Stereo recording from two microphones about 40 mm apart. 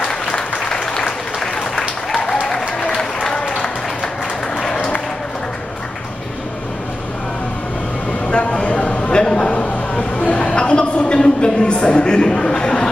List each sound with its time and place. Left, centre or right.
0.1 s applause: centre
3.5 s applause: centre
4.7 s applause: left
8.3 s a sound: left